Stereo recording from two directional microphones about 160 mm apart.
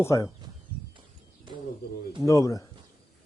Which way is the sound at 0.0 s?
20° left (ahead or behind).